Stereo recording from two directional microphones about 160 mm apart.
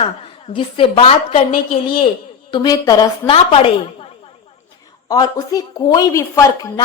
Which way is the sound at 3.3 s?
35° left (ahead or behind).